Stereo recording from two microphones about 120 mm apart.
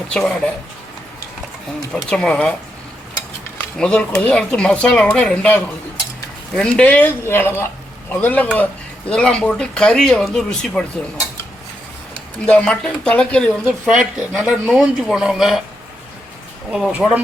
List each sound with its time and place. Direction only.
0.1 s speech: 5° left (ahead or behind)
1.9 s speech: 5° left (ahead or behind)
3.8 s speech: 5° left (ahead or behind)
6.6 s speech: 10° left (ahead or behind)
12.5 s speech: 10° left (ahead or behind)
13.8 s speech: 5° right (ahead or behind)
16.7 s speech: 5° right (ahead or behind)